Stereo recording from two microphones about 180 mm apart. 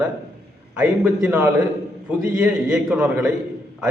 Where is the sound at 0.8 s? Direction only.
5° right (ahead or behind).